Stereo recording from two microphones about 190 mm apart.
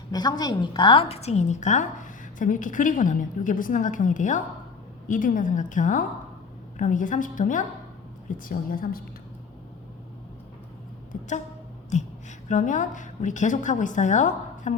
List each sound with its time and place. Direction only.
0.1 s a woman's voice: 20° left (ahead or behind); by 9.0 s 50° left (ahead or behind)
11.1 s a sound: 45° left (ahead or behind)
11.9 s a woman's voice: 35° left (ahead or behind)